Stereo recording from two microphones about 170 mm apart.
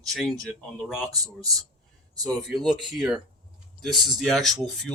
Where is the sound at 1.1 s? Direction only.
20° right (ahead or behind).